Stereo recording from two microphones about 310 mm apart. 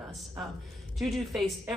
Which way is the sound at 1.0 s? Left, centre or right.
Centre.